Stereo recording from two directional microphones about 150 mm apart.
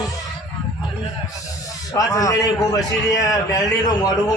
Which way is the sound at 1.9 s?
25° left (ahead or behind).